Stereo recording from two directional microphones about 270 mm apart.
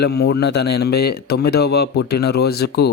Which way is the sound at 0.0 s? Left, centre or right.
Left.